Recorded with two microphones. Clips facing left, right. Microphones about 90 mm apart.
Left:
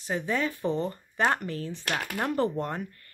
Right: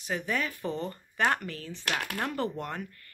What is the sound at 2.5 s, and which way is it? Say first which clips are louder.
Speech: left 4 dB; 30° left (ahead or behind).